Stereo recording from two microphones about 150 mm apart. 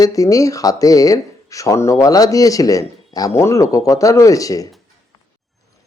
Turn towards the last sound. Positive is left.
turn(degrees=20)  # may be behind; listen again after turning